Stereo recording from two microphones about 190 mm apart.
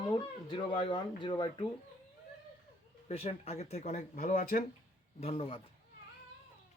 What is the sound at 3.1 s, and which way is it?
Speech, 30° left (ahead or behind).